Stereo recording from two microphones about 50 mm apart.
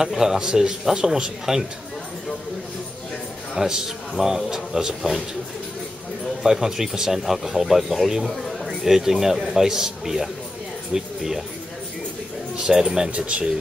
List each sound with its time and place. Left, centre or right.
0.0 s speech: centre
3.5 s speech: centre
6.4 s a man's voice: centre
12.6 s speech: centre